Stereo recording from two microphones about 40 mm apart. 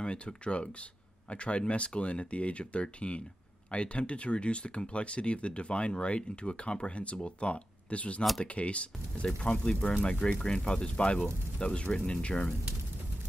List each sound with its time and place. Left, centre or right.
0.0 s speech: left